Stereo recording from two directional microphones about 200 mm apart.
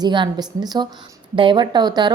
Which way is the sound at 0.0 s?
20° right (ahead or behind).